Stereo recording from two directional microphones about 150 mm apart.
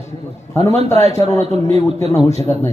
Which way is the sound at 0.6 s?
45° right (ahead or behind).